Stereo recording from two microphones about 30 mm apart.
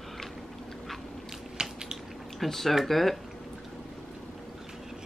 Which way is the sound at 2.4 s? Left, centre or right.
Centre.